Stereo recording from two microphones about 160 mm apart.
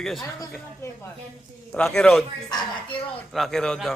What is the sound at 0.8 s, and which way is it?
Speech, 20° left (ahead or behind).